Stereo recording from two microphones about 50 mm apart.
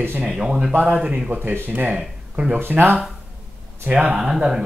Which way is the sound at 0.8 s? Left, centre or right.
Right.